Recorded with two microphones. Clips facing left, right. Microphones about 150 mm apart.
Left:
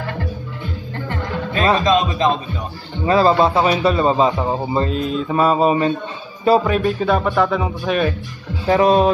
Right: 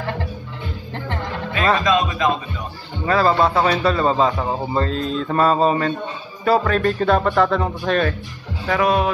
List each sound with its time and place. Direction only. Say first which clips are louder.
1.9 s speech: left 2 dB; 30° left (ahead or behind)
6.8 s speech: even; 5° left (ahead or behind)
8.6 s speech: left 5 dB; 30° left (ahead or behind)